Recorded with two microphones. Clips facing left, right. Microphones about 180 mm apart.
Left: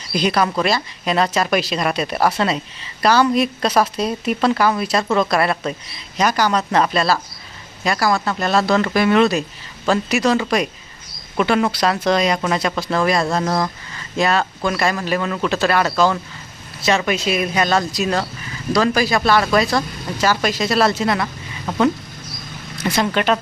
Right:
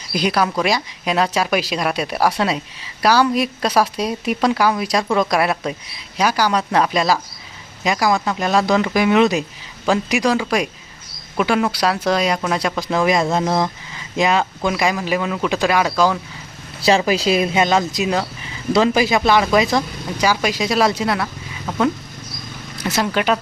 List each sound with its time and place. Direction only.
0.1 s speech: 10° right (ahead or behind)
16.8 s speech: 30° right (ahead or behind); by 21.2 s 5° right (ahead or behind)
22.9 s speech: 5° right (ahead or behind)